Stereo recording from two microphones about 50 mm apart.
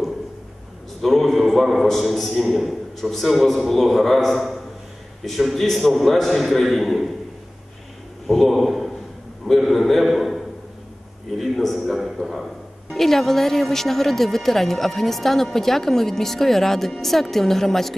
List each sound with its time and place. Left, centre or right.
1.0 s a man's voice: centre
8.3 s a man's voice: centre
11.3 s a sound: centre
12.9 s speech: centre